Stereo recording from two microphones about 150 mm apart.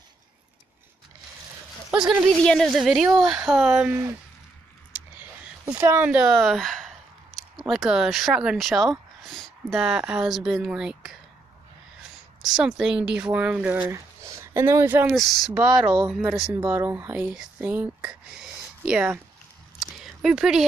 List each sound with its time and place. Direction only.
1.9 s speech: 5° right (ahead or behind)
5.7 s speech: 10° right (ahead or behind)
12.4 s speech: 5° right (ahead or behind)
15.1 s speech: centre (ahead or behind)
16.5 s speech: 15° right (ahead or behind)
19.8 s a sound: centre (ahead or behind)